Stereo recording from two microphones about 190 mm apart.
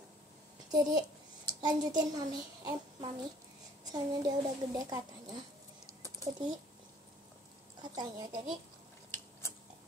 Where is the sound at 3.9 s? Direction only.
20° right (ahead or behind).